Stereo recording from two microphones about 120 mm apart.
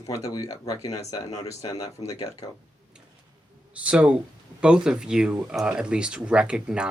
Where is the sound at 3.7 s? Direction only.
10° right (ahead or behind).